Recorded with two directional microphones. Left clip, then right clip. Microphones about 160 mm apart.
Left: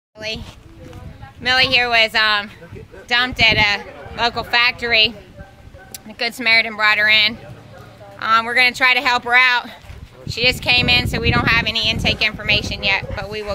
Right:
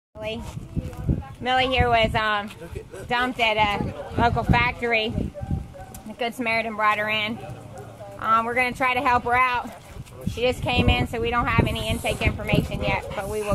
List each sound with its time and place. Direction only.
1.4 s speech: 10° left (ahead or behind)
6.1 s speech: 15° left (ahead or behind)